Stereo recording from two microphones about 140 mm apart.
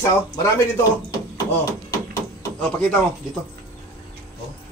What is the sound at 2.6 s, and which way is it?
Speech, 15° left (ahead or behind).